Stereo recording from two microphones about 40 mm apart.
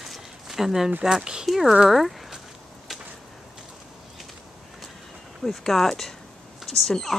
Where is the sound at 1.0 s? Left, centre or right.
Centre.